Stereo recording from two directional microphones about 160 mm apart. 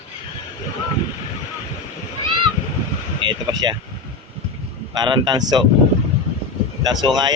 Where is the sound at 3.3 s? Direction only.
25° right (ahead or behind).